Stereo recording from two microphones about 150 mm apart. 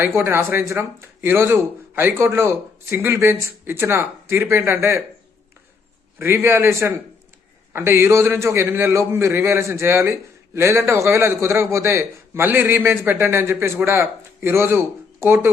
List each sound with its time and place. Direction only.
0.0 s a man's voice: 15° right (ahead or behind)
6.1 s a man's voice: 15° right (ahead or behind)